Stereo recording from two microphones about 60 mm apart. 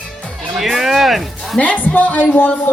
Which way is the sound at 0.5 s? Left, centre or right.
Centre.